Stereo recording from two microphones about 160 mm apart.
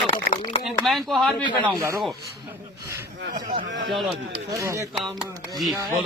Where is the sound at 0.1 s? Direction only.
40° left (ahead or behind).